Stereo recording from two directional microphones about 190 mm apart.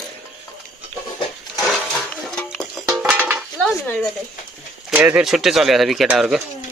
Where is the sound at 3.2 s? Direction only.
10° right (ahead or behind).